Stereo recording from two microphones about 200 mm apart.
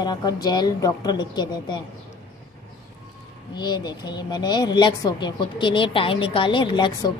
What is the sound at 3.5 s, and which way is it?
Speech, 20° left (ahead or behind).